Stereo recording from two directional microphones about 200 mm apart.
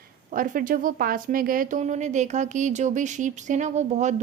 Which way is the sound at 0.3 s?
45° right (ahead or behind).